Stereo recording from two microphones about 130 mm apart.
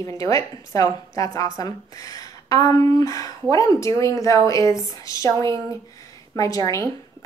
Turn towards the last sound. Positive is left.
turn(degrees=25)  # may be behind; listen again after turning